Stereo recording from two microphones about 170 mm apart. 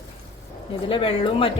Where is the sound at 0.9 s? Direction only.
30° left (ahead or behind).